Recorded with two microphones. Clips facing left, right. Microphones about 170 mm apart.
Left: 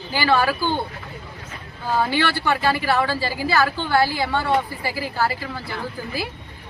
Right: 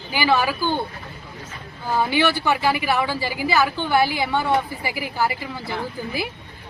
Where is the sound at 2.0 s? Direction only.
15° right (ahead or behind).